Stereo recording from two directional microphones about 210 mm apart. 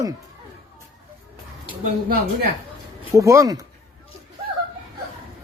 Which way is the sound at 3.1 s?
15° right (ahead or behind).